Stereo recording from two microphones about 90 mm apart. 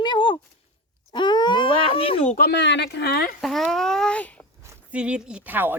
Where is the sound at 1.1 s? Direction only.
55° left (ahead or behind); by 2.2 s 90° left.